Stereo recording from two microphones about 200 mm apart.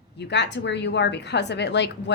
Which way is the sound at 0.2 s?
60° left (ahead or behind).